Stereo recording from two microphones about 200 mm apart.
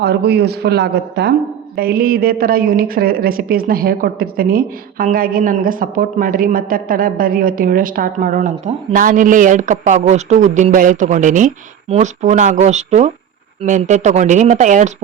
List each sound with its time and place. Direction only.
0.0 s a man's voice: 55° right (ahead or behind); by 14.9 s 40° right (ahead or behind)